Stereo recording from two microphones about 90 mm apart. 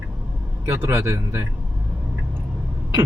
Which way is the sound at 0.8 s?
30° right (ahead or behind).